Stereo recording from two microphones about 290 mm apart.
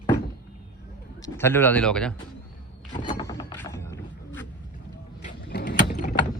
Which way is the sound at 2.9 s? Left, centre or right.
Centre.